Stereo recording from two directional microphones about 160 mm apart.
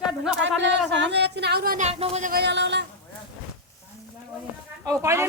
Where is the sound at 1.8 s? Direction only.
40° right (ahead or behind).